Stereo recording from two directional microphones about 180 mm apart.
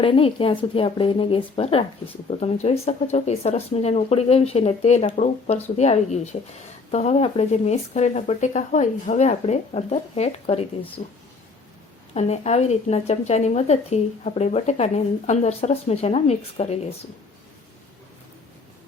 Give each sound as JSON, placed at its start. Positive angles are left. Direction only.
{"t": 0.0, "sound": "speech", "side_deg": 30}
{"t": 12.1, "sound": "speech", "side_deg": 40}